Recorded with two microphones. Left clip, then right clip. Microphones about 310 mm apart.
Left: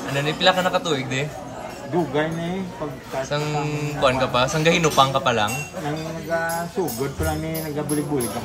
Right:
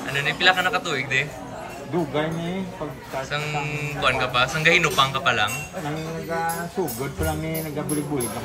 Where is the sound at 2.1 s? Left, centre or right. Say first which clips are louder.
Left 2 dB; centre.